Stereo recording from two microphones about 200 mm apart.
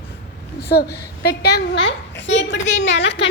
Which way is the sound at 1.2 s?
55° left (ahead or behind).